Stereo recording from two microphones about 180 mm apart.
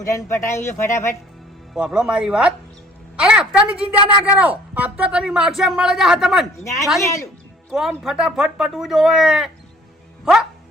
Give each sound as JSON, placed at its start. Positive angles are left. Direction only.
{"t": 0.0, "sound": "speech", "side_deg": 15}
{"t": 1.7, "sound": "a woman's voice", "side_deg": -5}